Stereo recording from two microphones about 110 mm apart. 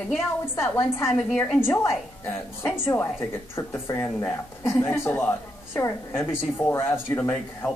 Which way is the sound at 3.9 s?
30° left (ahead or behind).